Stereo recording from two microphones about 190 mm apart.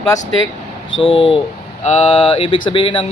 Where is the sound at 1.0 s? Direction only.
30° left (ahead or behind).